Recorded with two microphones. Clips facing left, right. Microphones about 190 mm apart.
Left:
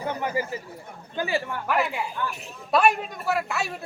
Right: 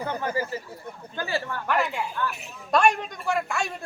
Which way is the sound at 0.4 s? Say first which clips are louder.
Even; 15° left (ahead or behind).